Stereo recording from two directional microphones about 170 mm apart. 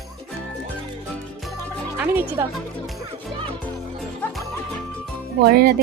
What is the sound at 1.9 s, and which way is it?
Speech, 10° right (ahead or behind).